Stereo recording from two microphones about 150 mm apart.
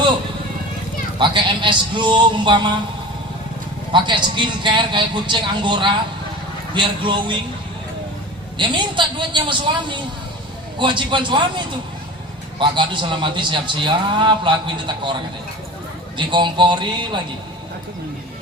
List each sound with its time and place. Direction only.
1.2 s a man's voice: 30° right (ahead or behind)
3.9 s a man's voice: 30° right (ahead or behind)
8.5 s a man's voice: 30° right (ahead or behind)
16.1 s a man's voice: 30° right (ahead or behind)